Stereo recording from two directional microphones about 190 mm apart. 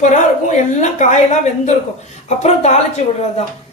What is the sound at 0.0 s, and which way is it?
Speech, 40° left (ahead or behind).